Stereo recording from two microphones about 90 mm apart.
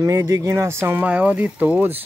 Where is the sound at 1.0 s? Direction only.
15° right (ahead or behind).